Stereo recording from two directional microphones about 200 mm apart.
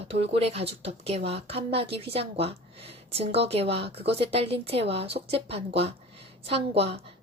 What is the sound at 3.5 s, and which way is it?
Speech, 30° right (ahead or behind).